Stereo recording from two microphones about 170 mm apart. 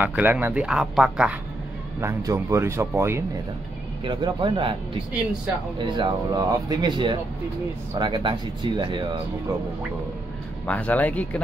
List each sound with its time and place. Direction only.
0.0 s speech: 10° right (ahead or behind)
2.0 s speech: 15° right (ahead or behind)
4.0 s speech: 30° right (ahead or behind)
5.8 s speech: 30° right (ahead or behind)
10.7 s speech: 10° left (ahead or behind)